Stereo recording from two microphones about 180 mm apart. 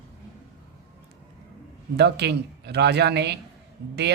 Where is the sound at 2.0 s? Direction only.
65° right (ahead or behind).